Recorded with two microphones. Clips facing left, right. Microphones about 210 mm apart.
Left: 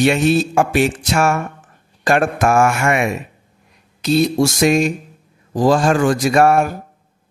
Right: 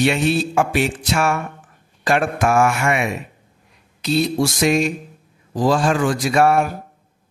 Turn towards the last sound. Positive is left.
turn(degrees=45)  # may be behind; listen again after turning